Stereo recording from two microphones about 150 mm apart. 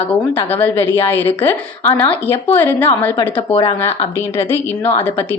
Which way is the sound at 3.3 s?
35° left (ahead or behind).